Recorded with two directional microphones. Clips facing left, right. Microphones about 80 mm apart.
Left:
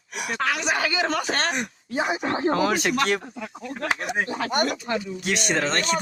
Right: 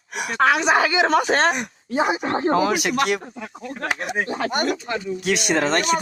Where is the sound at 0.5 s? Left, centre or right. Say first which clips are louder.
Right 7 dB; right.